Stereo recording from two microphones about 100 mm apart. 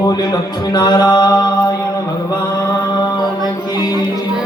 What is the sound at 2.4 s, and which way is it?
Mantra, 35° left (ahead or behind).